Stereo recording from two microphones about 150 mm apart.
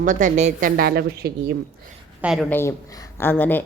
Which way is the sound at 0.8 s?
90° right.